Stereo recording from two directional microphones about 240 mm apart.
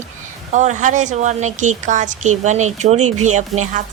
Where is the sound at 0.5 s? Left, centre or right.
Right.